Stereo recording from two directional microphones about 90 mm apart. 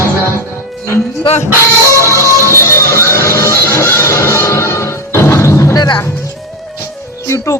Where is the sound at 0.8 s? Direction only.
30° left (ahead or behind).